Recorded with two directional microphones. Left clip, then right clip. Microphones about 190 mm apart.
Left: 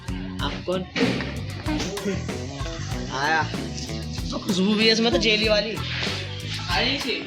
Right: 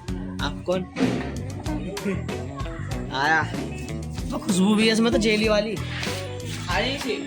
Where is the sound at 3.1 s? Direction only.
45° right (ahead or behind).